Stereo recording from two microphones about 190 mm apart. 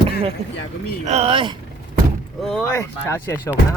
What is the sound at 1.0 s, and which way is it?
Speech, 35° right (ahead or behind).